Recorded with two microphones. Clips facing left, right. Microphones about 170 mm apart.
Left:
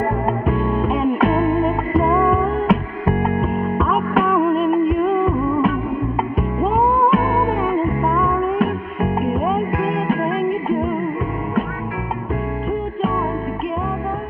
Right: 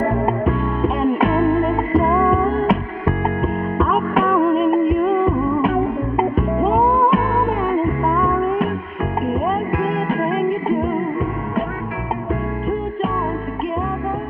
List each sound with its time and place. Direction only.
0.8 s music: centre (ahead or behind)